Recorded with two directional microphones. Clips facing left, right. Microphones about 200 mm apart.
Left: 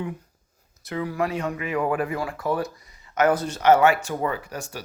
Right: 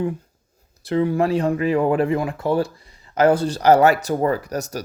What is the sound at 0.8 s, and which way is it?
Speech, 30° right (ahead or behind).